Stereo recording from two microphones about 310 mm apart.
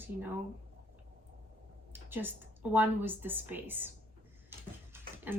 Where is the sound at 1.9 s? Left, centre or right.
Centre.